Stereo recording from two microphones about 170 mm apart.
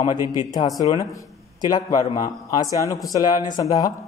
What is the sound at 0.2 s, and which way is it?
Speech, 20° right (ahead or behind).